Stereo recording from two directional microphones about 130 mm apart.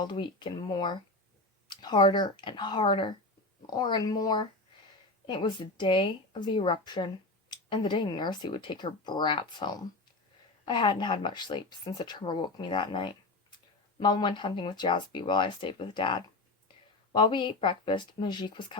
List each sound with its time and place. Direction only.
0.0 s speech: 35° left (ahead or behind)